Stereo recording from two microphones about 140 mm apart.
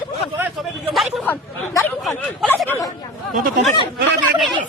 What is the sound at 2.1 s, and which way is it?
Chatter, 5° left (ahead or behind).